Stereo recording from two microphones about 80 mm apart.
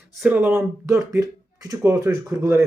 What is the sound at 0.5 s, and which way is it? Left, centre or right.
Speech, right.